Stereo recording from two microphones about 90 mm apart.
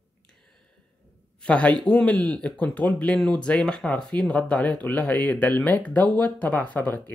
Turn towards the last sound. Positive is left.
turn(degrees=20)  # may be behind; listen again after turning